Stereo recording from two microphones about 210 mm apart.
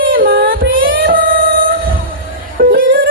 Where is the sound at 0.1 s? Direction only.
45° right (ahead or behind).